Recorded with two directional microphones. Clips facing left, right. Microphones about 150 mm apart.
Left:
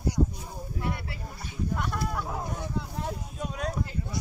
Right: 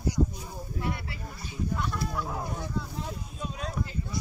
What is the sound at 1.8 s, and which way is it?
Speech, 55° left (ahead or behind).